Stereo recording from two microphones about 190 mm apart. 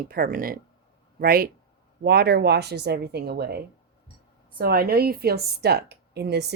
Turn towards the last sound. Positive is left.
turn(degrees=-60)  # may be behind; listen again after turning